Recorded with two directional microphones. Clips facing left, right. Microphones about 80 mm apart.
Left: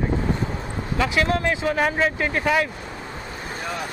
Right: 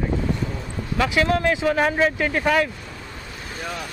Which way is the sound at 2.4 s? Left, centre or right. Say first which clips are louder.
Right 1 dB; centre.